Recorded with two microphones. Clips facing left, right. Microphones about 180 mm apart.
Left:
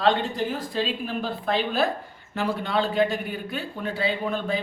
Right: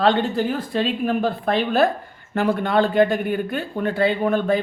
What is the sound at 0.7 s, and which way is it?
Speech, 60° right (ahead or behind).